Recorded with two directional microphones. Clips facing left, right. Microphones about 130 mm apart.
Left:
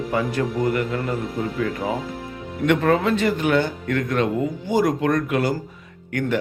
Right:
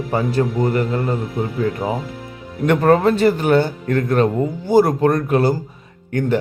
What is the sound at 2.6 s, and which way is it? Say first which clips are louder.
A man's voice: right 4 dB; 40° right (ahead or behind).